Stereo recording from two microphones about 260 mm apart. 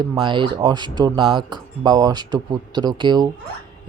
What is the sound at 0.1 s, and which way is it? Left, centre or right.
Speech, centre.